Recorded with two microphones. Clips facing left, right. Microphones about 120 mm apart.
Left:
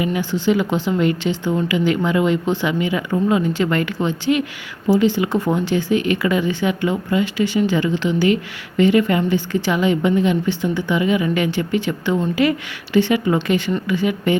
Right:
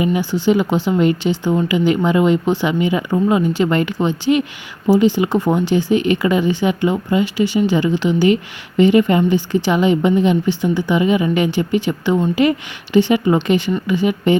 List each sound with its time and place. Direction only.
0.2 s a woman's voice: 15° right (ahead or behind)